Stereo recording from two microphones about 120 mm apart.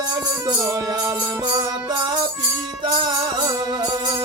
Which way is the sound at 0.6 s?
25° right (ahead or behind).